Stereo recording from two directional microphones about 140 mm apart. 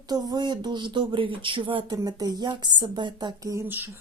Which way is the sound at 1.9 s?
25° right (ahead or behind).